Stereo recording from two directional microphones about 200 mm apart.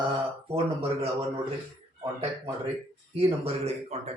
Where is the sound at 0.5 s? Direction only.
30° right (ahead or behind).